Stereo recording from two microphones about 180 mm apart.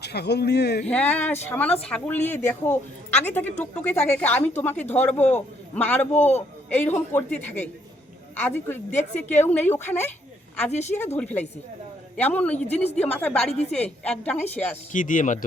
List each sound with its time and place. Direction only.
0.0 s speech: 65° left (ahead or behind)
0.9 s a woman's voice: 10° left (ahead or behind)
6.1 s a woman's voice: 35° left (ahead or behind)
6.7 s a woman's voice: 10° left (ahead or behind)
10.7 s a woman's voice: 40° left (ahead or behind)
11.2 s a woman's voice: 10° left (ahead or behind)
14.9 s speech: 45° left (ahead or behind)